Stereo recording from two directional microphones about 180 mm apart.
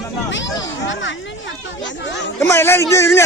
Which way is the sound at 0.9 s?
90° left.